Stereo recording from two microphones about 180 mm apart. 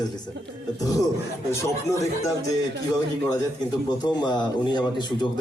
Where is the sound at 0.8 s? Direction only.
20° left (ahead or behind).